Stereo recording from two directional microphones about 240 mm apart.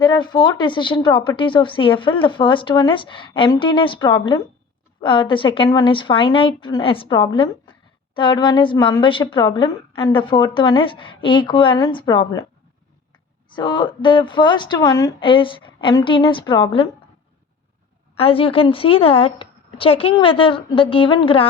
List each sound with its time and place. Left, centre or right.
0.0 s speech: centre
13.6 s speech: centre
18.2 s speech: left